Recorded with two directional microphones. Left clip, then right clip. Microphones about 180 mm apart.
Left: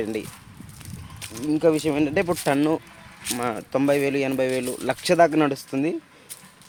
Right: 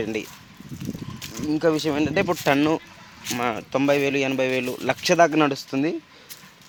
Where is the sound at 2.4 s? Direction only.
15° right (ahead or behind).